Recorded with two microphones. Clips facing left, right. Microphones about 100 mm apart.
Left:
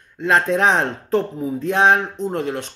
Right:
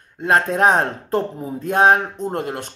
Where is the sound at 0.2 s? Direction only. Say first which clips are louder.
Even; 45° right (ahead or behind).